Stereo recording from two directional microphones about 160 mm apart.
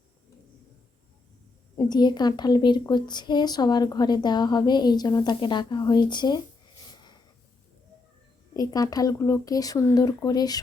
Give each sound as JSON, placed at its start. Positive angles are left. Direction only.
{"t": 1.7, "sound": "speech", "side_deg": 25}
{"t": 8.5, "sound": "speech", "side_deg": 20}